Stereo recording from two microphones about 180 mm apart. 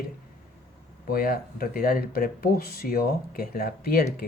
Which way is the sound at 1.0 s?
55° left (ahead or behind).